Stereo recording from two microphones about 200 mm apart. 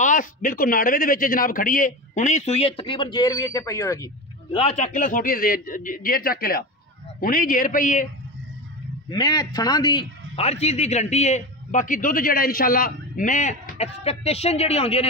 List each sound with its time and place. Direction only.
0.0 s speech: 40° left (ahead or behind); by 4.6 s 15° left (ahead or behind)
4.6 s a man's voice: 35° left (ahead or behind)
9.1 s speech: 20° left (ahead or behind)